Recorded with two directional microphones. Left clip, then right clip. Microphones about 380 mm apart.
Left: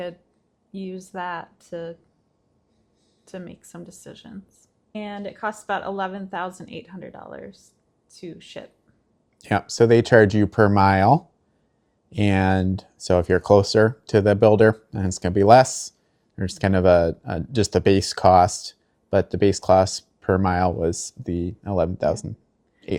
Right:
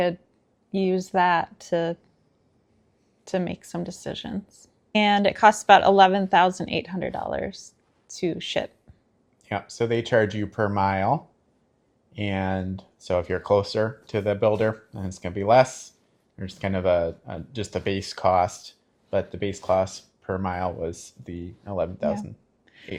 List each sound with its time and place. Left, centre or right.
0.7 s speech: centre
3.2 s speech: right
9.4 s speech: left